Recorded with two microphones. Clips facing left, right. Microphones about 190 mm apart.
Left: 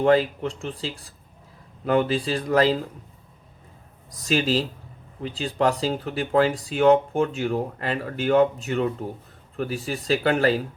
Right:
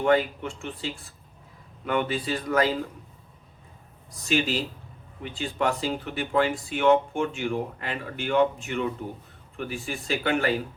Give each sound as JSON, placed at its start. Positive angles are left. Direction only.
{"t": 0.0, "sound": "speech", "side_deg": 35}
{"t": 4.2, "sound": "speech", "side_deg": 35}